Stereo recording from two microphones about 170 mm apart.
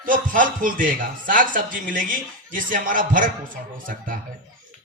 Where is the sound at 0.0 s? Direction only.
50° right (ahead or behind).